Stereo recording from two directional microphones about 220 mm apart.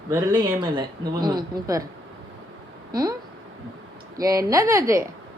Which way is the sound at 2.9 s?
15° right (ahead or behind).